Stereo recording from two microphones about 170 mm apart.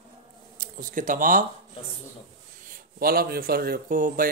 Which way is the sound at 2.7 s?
60° right (ahead or behind).